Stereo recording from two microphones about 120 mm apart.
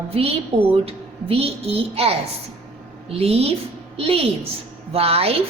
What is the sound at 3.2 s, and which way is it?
A woman's voice, 55° right (ahead or behind).